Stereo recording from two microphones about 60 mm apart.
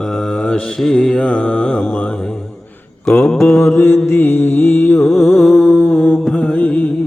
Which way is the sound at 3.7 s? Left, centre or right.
Left.